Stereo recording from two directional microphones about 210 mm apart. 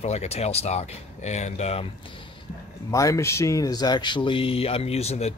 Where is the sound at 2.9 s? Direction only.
15° left (ahead or behind).